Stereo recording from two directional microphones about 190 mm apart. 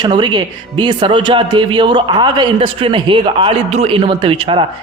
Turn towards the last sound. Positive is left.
turn(degrees=-25)  # may be behind; listen again after turning